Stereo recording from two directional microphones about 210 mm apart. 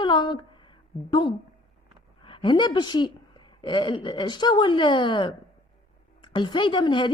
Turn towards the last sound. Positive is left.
turn(degrees=20)  # may be behind; listen again after turning